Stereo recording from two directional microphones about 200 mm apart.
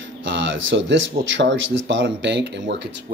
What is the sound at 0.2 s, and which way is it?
Speech, 65° right (ahead or behind).